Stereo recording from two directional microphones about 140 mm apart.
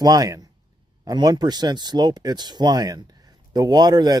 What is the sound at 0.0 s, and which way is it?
Speech, 25° right (ahead or behind).